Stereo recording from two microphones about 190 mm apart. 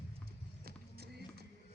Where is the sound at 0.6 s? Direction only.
55° right (ahead or behind).